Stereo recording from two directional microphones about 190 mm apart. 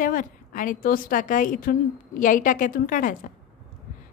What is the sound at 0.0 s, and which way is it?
A woman's voice, 45° left (ahead or behind).